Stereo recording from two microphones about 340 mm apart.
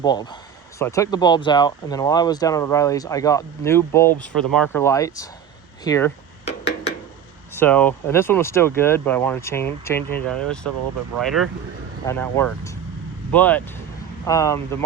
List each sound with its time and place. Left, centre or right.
0.0 s speech: centre
7.5 s speech: centre